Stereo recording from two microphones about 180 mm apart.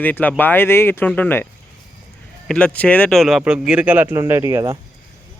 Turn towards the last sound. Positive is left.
turn(degrees=-15)  # may be behind; listen again after turning